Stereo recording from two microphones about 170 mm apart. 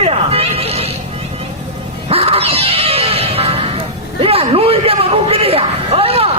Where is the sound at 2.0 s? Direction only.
35° right (ahead or behind).